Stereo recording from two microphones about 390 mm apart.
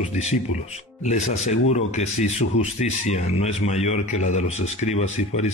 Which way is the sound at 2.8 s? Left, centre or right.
Centre.